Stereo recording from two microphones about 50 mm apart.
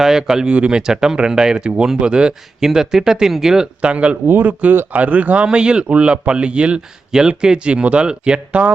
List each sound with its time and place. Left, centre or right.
0.0 s speech: centre
0.5 s a man's voice: right
0.8 s speech: centre
3.8 s a man's voice: right
4.3 s a man's voice: right